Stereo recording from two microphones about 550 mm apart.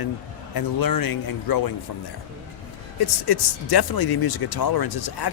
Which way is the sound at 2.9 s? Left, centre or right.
Left.